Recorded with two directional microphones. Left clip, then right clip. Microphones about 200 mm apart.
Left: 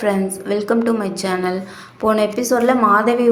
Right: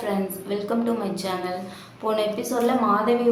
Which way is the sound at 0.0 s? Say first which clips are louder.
Left 8 dB; 35° left (ahead or behind).